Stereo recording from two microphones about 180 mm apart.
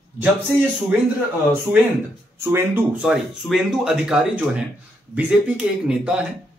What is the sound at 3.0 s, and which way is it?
Speech, 5° right (ahead or behind).